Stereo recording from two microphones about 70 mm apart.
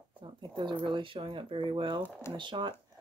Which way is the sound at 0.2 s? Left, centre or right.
Right.